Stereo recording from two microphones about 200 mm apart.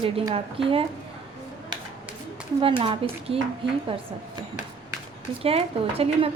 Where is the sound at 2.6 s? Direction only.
25° right (ahead or behind).